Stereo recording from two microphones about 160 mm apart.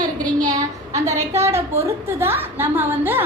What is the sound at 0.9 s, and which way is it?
A woman's voice, 20° right (ahead or behind).